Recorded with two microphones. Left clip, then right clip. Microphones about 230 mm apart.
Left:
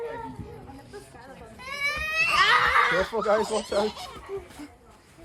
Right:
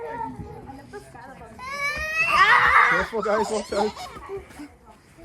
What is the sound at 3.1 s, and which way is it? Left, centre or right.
Speech, left.